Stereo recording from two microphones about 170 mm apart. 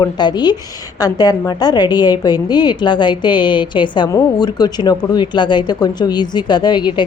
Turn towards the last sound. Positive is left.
turn(degrees=25)  # may be behind; listen again after turning